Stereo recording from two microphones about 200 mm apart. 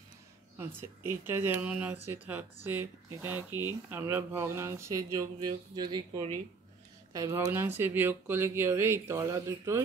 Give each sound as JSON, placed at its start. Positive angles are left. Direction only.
{"t": 0.6, "sound": "speech", "side_deg": -10}
{"t": 3.5, "sound": "speech", "side_deg": 20}
{"t": 3.9, "sound": "speech", "side_deg": -10}